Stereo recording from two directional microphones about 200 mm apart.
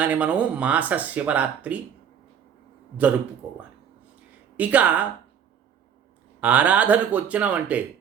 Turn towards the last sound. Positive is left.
turn(degrees=-5)  # may be behind; listen again after turning